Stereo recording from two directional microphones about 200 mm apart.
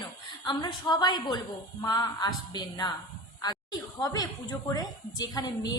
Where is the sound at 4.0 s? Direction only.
20° left (ahead or behind).